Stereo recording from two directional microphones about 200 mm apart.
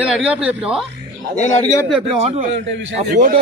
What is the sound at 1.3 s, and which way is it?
Speech, 35° left (ahead or behind).